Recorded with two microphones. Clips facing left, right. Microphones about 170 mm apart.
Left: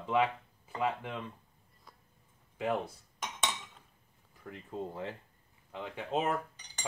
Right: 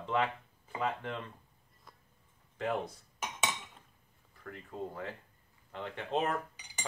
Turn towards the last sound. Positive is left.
turn(degrees=-10)  # may be behind; listen again after turning